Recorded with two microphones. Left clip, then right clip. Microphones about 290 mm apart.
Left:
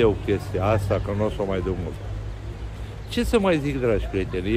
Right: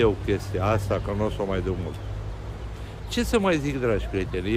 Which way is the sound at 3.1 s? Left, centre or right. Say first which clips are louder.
Left 2 dB; centre.